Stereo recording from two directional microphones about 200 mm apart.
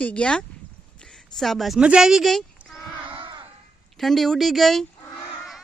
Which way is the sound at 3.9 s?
Centre (ahead or behind).